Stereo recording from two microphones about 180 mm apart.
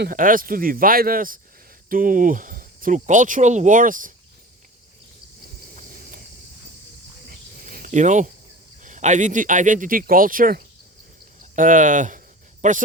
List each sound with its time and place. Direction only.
0.0 s speech: 50° right (ahead or behind)
5.7 s a sound: 45° right (ahead or behind)
7.3 s cricket: 50° right (ahead or behind)
8.8 s speech: 45° right (ahead or behind)